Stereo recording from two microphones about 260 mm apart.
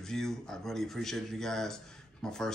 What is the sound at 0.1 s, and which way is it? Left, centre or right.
Speech, centre.